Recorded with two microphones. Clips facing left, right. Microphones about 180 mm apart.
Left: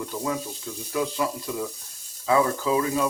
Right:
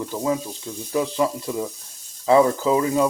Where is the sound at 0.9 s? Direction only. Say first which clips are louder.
Right 5 dB; 30° right (ahead or behind).